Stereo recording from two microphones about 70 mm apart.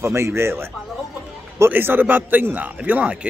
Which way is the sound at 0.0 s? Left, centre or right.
Right.